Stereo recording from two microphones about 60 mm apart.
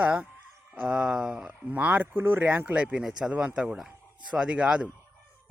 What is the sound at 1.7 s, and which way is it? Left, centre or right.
Speech, right.